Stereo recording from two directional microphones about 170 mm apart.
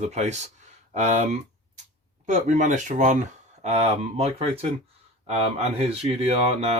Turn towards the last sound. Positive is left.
turn(degrees=-40)  # may be behind; listen again after turning